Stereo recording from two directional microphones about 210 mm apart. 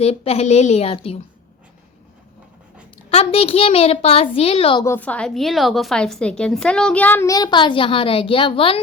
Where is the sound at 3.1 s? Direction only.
30° left (ahead or behind).